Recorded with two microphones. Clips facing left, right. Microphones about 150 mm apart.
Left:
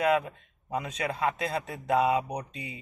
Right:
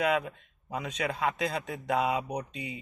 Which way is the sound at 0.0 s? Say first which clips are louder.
Left 2 dB; 30° left (ahead or behind).